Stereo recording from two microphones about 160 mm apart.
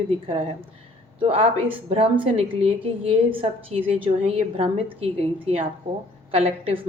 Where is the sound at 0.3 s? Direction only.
35° right (ahead or behind).